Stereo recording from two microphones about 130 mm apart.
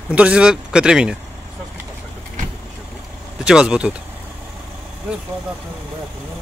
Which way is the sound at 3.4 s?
5° right (ahead or behind).